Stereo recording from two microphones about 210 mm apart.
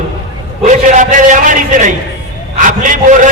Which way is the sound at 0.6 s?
35° right (ahead or behind).